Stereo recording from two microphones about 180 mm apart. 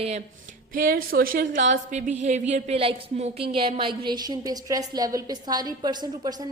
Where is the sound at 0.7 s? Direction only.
55° right (ahead or behind).